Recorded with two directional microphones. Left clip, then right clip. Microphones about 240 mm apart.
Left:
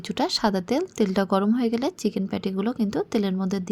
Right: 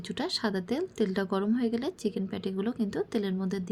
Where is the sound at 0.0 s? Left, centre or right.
Left.